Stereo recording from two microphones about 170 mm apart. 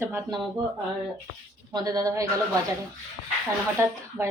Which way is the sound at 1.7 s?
20° right (ahead or behind).